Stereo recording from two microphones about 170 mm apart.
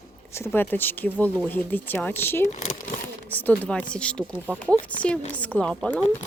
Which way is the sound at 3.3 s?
10° left (ahead or behind).